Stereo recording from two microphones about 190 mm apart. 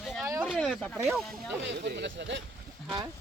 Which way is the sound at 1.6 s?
65° right (ahead or behind).